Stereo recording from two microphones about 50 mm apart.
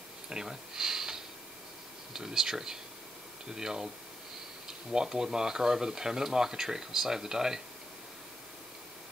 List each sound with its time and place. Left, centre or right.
0.3 s speech: centre